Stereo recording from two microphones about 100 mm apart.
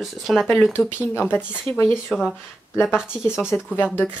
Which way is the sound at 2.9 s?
5° right (ahead or behind).